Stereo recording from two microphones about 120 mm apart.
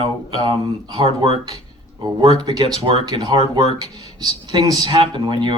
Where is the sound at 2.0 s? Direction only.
35° right (ahead or behind).